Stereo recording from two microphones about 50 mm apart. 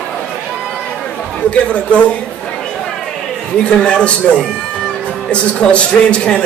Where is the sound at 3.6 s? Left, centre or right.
Centre.